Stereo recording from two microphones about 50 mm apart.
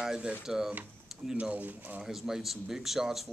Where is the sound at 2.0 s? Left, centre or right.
Centre.